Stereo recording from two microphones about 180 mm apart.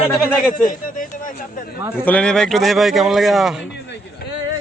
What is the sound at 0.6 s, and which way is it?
Speech, 50° left (ahead or behind).